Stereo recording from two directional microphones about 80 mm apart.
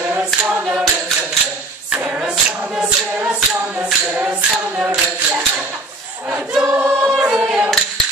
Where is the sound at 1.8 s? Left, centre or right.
Centre.